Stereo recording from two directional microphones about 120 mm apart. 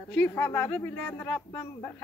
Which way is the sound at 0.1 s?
15° left (ahead or behind).